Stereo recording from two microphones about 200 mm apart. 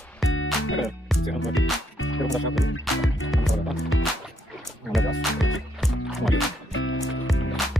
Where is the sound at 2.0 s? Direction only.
90° left.